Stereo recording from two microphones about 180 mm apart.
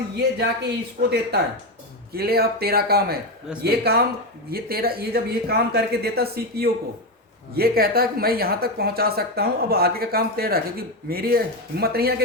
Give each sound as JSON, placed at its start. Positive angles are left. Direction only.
{"t": 0.2, "sound": "a woman's voice", "side_deg": -65}
{"t": 1.0, "sound": "speech", "side_deg": -40}
{"t": 2.1, "sound": "a woman's voice", "side_deg": -60}